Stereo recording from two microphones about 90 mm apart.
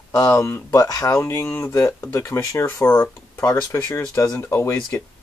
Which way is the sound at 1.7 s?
35° left (ahead or behind).